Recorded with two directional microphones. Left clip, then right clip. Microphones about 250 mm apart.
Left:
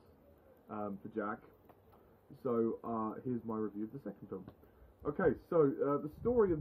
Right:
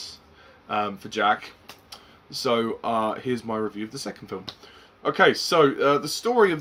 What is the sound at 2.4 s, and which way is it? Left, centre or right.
Speech, centre.